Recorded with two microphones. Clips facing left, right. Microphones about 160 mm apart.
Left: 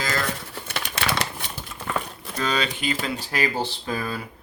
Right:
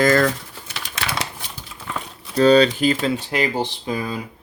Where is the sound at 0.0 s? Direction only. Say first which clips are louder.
Right 11 dB; 55° right (ahead or behind).